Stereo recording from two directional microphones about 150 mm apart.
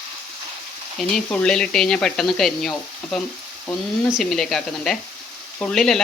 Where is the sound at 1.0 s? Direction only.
5° left (ahead or behind).